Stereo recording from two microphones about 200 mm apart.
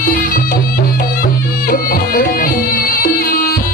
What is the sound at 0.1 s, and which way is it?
Music, 45° left (ahead or behind).